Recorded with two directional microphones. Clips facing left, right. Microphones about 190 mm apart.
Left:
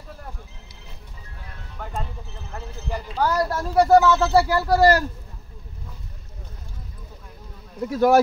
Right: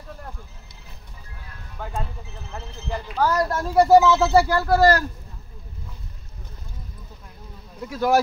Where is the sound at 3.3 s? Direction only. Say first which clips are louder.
Even; 5° left (ahead or behind).